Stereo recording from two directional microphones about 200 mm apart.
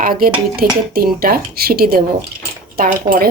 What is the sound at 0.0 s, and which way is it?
Speech, 45° right (ahead or behind).